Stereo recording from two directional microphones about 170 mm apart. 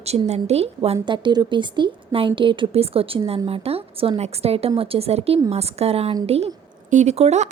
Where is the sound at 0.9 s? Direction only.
30° right (ahead or behind).